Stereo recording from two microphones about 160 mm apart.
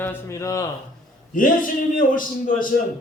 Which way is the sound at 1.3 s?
55° left (ahead or behind).